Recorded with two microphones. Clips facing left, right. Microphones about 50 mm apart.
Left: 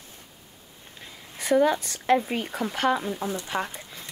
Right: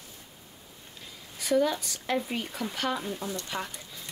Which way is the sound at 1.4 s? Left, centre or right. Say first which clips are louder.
Left 4 dB; left.